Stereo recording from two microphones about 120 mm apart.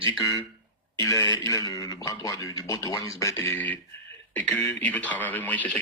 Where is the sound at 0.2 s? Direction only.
30° left (ahead or behind).